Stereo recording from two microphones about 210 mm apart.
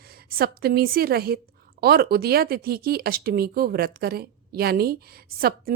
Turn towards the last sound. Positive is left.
turn(degrees=-45)  # may be behind; listen again after turning